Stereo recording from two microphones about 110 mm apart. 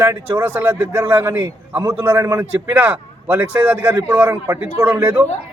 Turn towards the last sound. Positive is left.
turn(degrees=-15)  # may be behind; listen again after turning